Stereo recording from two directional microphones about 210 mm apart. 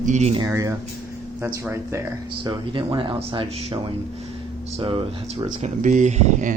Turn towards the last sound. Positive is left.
turn(degrees=-35)  # may be behind; listen again after turning